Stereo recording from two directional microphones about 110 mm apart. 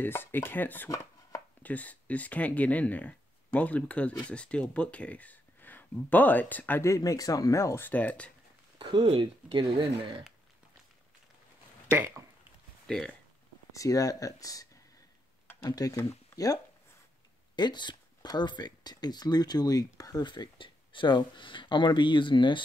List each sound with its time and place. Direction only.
0.0 s speech: 20° left (ahead or behind)
0.8 s chopping: 30° left (ahead or behind)
1.6 s speech: 15° left (ahead or behind)
8.7 s speech: 55° right (ahead or behind)
12.8 s speech: 5° left (ahead or behind)
13.7 s speech: 30° left (ahead or behind)
17.6 s speech: 40° left (ahead or behind)